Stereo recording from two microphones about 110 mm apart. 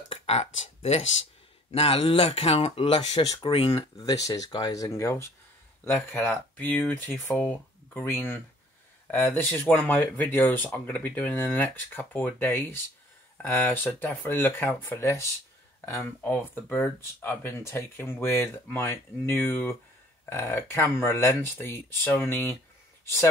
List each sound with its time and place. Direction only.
0.1 s speech: 75° left (ahead or behind)
1.7 s speech: 60° left (ahead or behind)
3.4 s speech: 55° left (ahead or behind)
3.7 s speech: 35° left (ahead or behind)